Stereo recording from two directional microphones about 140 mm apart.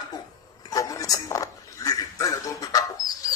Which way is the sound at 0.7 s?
25° left (ahead or behind).